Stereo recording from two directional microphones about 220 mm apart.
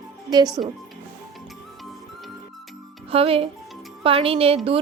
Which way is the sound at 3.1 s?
25° right (ahead or behind).